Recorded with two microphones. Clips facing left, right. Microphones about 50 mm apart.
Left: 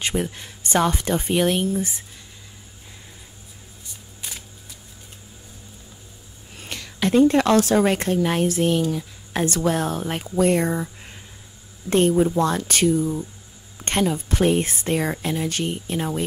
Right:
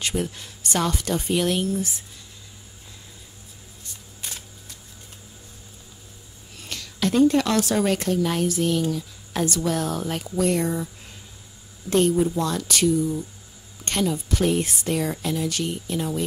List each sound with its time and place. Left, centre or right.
0.0 s speech: left
6.6 s a woman's voice: left
11.9 s speech: left